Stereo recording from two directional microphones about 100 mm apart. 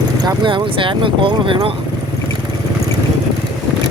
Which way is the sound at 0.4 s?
55° right (ahead or behind).